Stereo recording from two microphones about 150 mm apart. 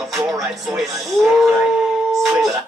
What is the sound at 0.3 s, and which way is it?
Music, centre (ahead or behind).